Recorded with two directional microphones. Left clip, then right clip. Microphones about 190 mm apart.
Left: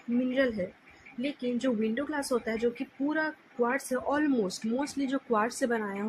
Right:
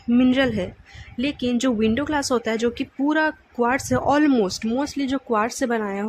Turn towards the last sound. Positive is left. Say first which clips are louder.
# right 7 dB
turn(degrees=-25)  # may be behind; listen again after turning